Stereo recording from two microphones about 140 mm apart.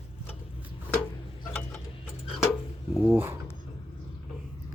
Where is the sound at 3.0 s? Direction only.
15° right (ahead or behind).